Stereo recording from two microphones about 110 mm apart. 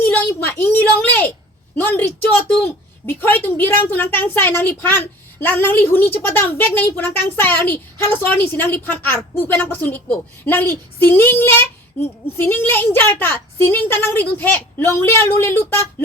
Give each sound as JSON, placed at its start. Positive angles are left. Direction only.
{"t": 0.0, "sound": "a sound", "side_deg": 15}
{"t": 1.7, "sound": "a woman's voice", "side_deg": 15}
{"t": 3.1, "sound": "a woman's voice", "side_deg": 20}